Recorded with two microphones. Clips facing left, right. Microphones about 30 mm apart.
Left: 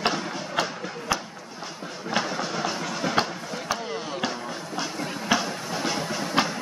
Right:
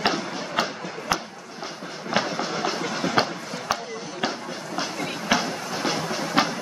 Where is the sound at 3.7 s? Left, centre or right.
Centre.